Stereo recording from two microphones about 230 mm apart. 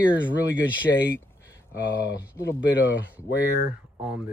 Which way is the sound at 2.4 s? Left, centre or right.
Left.